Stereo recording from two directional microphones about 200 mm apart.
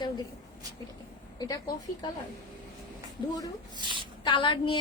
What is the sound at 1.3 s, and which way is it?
Speech, 20° left (ahead or behind).